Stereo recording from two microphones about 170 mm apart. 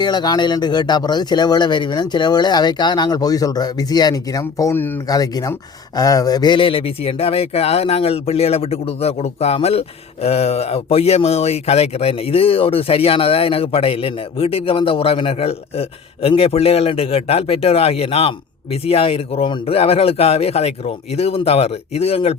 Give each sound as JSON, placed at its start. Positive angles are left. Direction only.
{"t": 0.0, "sound": "speech", "side_deg": 25}